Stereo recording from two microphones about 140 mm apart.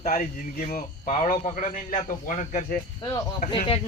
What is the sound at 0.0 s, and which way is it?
A man's voice, 75° left (ahead or behind).